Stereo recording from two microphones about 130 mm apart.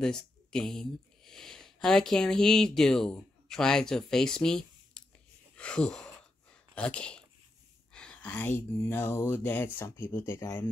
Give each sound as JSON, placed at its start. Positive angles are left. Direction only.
{"t": 0.0, "sound": "speech", "side_deg": 5}